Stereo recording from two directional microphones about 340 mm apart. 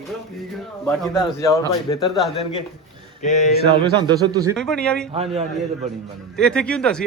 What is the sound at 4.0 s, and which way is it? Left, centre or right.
Speech, centre.